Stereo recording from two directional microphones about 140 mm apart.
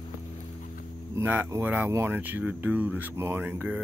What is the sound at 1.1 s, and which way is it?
Speech, 15° right (ahead or behind).